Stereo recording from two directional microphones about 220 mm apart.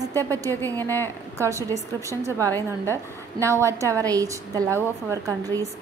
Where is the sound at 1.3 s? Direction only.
15° right (ahead or behind).